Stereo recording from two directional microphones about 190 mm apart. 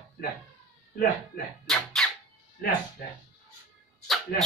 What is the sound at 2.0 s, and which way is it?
Music, centre (ahead or behind).